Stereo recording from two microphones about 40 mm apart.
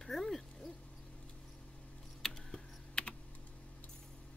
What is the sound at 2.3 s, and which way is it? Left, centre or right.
Typing, left.